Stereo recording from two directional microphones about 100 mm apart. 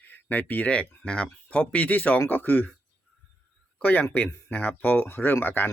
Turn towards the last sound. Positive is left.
turn(degrees=20)  # may be behind; listen again after turning